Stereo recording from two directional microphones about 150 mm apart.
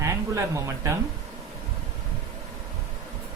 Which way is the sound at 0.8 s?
20° right (ahead or behind).